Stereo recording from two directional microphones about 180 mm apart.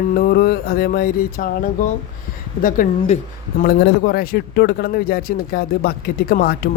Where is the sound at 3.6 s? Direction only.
60° left (ahead or behind).